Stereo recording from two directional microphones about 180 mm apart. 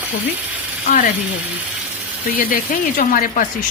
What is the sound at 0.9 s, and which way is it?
Speech, 45° left (ahead or behind).